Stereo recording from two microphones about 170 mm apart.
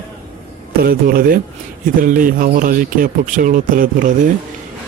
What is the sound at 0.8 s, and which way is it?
A man's voice, 60° right (ahead or behind).